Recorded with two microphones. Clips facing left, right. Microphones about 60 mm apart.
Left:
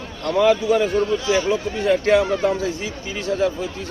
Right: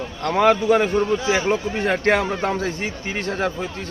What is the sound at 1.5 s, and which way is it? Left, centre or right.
Speech, right.